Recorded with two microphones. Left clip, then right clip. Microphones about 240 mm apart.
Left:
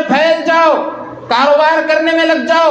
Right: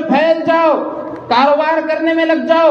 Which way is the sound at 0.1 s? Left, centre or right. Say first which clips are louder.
Left 1 dB; left.